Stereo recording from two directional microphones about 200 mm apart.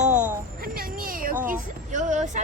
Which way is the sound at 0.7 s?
45° right (ahead or behind).